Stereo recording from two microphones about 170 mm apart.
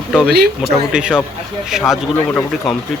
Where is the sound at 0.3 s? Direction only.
70° right (ahead or behind).